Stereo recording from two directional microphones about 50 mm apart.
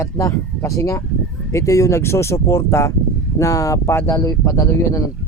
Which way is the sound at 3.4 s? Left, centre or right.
Left.